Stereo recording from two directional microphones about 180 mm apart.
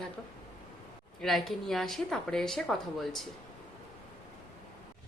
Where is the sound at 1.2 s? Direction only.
Centre (ahead or behind).